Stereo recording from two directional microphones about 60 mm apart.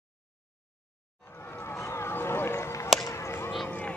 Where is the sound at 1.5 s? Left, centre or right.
Left.